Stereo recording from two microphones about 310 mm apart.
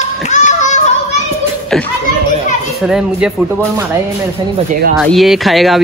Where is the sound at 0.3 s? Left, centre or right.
Left.